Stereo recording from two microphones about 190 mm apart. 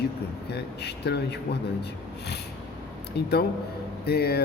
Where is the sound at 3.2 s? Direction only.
60° left (ahead or behind).